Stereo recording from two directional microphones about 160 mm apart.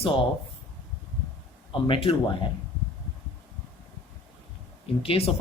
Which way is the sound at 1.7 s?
35° left (ahead or behind).